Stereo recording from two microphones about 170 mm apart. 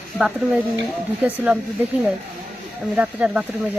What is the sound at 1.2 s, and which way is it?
Speech, 10° right (ahead or behind).